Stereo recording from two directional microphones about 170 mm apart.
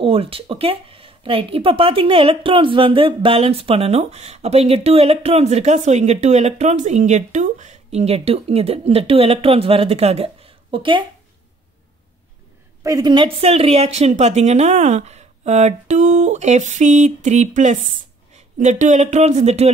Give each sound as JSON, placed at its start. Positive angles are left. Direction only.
{"t": 0.0, "sound": "speech", "side_deg": -35}
{"t": 12.8, "sound": "speech", "side_deg": -20}